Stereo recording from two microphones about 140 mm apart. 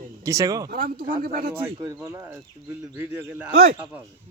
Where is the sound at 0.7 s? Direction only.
90° right.